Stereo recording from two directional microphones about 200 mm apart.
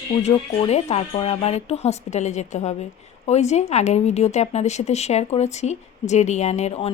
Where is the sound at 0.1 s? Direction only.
35° left (ahead or behind).